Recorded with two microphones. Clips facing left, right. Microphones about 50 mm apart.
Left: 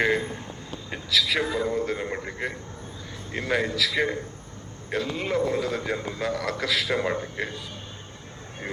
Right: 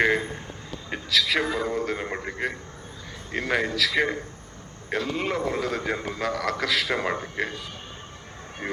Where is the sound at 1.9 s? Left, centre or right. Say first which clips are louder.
Even; centre.